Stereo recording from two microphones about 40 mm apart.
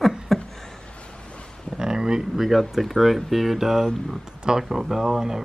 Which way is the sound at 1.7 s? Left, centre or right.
Centre.